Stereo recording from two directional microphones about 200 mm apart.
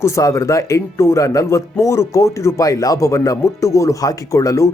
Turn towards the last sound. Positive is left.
turn(degrees=15)  # may be behind; listen again after turning